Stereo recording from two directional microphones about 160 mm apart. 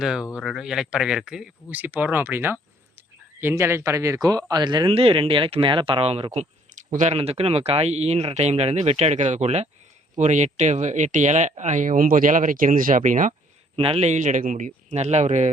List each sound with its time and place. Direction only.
0.0 s speech: 5° right (ahead or behind); by 13.3 s 50° right (ahead or behind)
13.7 s speech: 40° right (ahead or behind)